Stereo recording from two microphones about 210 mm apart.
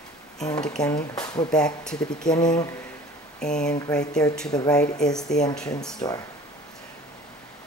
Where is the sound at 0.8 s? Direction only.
20° left (ahead or behind).